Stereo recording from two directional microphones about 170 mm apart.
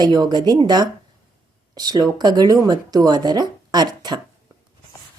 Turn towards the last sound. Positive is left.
turn(degrees=-25)  # may be behind; listen again after turning